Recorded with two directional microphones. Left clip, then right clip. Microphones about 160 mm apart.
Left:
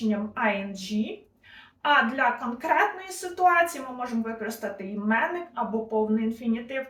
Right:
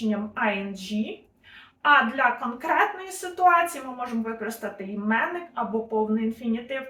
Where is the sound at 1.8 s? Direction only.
5° right (ahead or behind).